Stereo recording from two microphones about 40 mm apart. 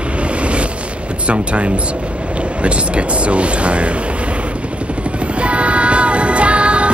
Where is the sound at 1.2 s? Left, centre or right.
Right.